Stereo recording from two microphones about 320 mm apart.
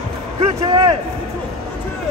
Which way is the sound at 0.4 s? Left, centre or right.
Centre.